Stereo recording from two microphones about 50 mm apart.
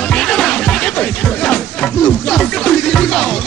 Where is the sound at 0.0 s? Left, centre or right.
Centre.